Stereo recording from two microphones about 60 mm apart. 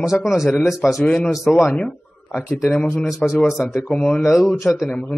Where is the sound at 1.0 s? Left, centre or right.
Centre.